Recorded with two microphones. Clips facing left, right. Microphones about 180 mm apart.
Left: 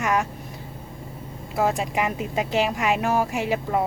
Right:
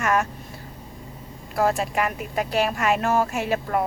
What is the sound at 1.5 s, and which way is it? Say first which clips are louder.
A woman's voice: right 1 dB; 15° left (ahead or behind).